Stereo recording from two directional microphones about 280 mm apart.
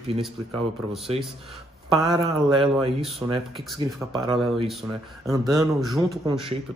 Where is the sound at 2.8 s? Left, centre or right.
Right.